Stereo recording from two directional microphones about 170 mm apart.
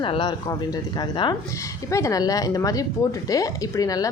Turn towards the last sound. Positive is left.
turn(degrees=20)  # may be behind; listen again after turning